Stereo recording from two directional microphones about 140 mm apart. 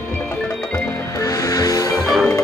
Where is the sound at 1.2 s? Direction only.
25° left (ahead or behind).